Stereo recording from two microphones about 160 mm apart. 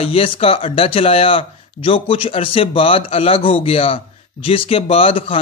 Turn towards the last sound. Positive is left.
turn(degrees=35)  # may be behind; listen again after turning